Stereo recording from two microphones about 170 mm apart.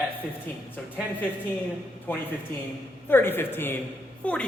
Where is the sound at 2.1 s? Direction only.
10° left (ahead or behind).